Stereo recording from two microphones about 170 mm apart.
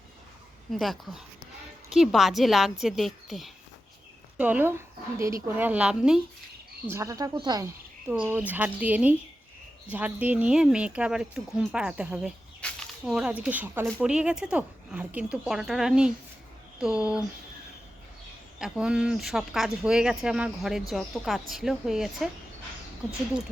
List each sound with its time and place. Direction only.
0.7 s speech: centre (ahead or behind)
6.9 s speech: 20° right (ahead or behind)
8.0 s speech: 10° right (ahead or behind)
12.6 s a sound: 5° left (ahead or behind)
13.1 s speech: 5° right (ahead or behind)
18.6 s speech: 5° right (ahead or behind)